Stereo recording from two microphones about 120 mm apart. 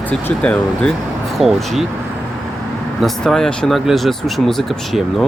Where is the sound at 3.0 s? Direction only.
5° left (ahead or behind).